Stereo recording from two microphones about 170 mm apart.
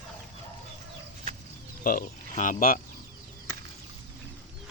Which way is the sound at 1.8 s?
55° left (ahead or behind).